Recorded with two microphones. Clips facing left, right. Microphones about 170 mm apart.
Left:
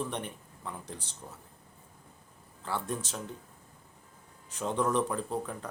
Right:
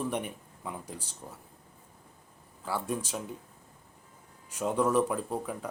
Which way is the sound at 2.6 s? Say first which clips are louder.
Right 2 dB; 10° right (ahead or behind).